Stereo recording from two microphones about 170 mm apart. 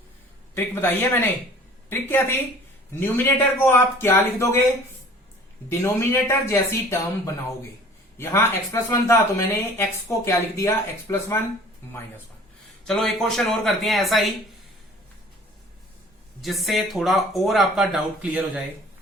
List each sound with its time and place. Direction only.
0.5 s speech: 15° left (ahead or behind)
5.6 s speech: 15° left (ahead or behind)
8.2 s speech: 15° left (ahead or behind)
12.8 s speech: 5° left (ahead or behind)
16.4 s speech: centre (ahead or behind)